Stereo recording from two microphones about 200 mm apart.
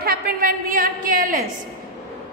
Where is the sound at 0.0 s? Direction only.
50° right (ahead or behind).